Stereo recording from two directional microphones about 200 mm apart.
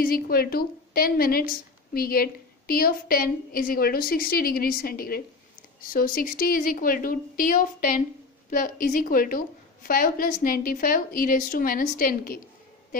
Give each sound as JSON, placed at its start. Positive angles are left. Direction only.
{"t": 0.0, "sound": "a woman's voice", "side_deg": 50}